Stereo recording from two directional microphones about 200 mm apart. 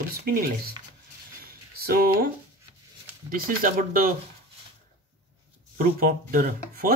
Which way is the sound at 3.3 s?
45° right (ahead or behind).